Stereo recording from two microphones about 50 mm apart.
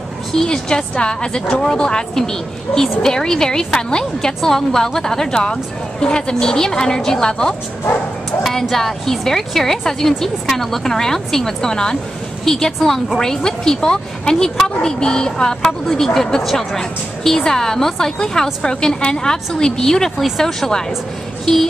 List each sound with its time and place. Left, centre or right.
0.3 s a woman's voice: centre